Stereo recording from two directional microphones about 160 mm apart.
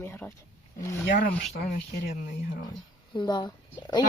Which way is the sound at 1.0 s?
60° left (ahead or behind).